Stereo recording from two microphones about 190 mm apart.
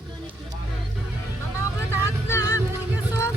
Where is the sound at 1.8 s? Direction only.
15° left (ahead or behind).